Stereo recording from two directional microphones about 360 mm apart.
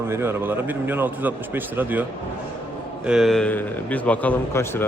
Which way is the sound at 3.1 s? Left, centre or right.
Centre.